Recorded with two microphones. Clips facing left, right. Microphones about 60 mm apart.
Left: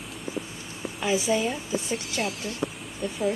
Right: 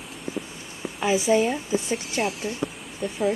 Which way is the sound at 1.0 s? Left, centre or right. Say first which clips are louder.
Right 4 dB; centre.